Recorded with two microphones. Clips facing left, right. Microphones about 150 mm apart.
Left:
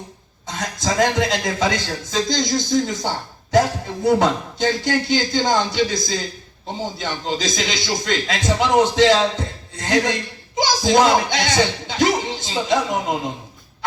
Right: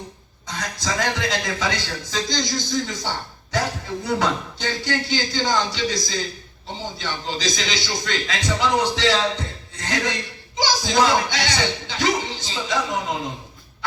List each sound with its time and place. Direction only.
0.4 s a man's voice: 45° left (ahead or behind)